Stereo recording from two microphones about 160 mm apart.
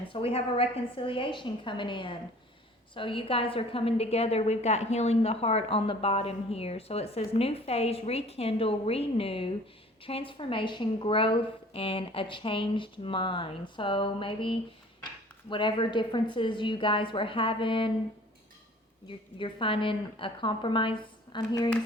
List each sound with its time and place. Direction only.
0.1 s a woman's voice: 35° left (ahead or behind)
19.0 s a woman's voice: 30° left (ahead or behind)